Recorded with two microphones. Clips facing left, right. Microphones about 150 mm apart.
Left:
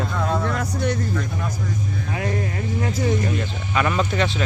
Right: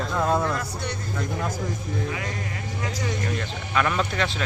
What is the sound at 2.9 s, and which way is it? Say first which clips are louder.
Speech: left 8 dB; 50° left (ahead or behind).